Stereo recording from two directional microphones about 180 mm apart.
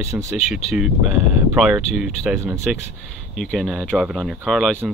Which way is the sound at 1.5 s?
5° right (ahead or behind).